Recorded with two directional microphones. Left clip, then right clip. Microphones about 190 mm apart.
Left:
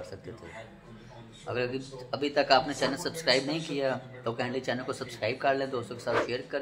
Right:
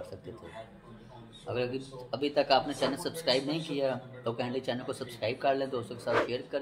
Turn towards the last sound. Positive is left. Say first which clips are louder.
# even
turn(degrees=0)  # may be behind; listen again after turning